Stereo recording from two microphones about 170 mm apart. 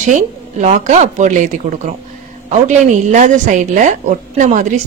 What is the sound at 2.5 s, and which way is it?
A woman's voice, 45° right (ahead or behind).